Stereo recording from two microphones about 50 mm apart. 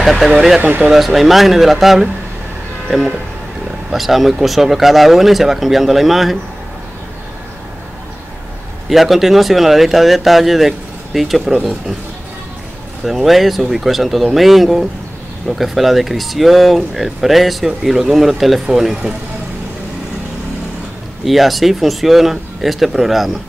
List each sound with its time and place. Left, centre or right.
0.0 s speech: centre
0.6 s speech: right
0.8 s speech: centre
8.8 s speech: centre
13.0 s speech: centre
21.2 s speech: centre